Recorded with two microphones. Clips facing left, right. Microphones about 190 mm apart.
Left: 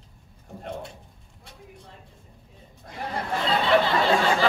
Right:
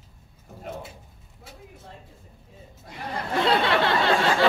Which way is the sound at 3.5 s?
75° right (ahead or behind).